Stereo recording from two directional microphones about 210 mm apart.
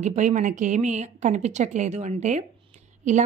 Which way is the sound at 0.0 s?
35° right (ahead or behind).